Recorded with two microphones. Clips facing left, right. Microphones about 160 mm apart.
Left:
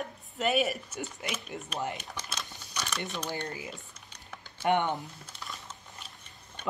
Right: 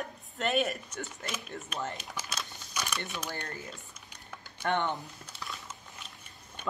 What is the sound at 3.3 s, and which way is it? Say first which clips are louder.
Speech: left 3 dB; 15° left (ahead or behind).